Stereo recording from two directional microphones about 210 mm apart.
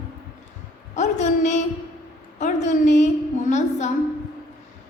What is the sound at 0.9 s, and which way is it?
A woman's voice, 35° left (ahead or behind).